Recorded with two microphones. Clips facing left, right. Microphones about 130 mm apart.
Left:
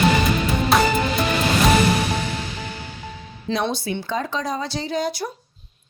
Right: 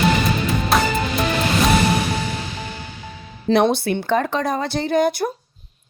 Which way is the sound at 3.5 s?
60° right (ahead or behind).